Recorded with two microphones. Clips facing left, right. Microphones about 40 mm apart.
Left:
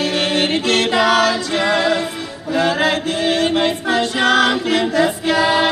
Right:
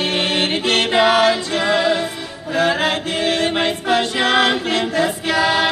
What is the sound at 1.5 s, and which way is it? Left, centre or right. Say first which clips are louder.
Music: left 1 dB; left.